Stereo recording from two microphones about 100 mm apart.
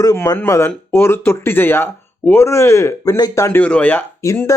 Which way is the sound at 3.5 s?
15° left (ahead or behind).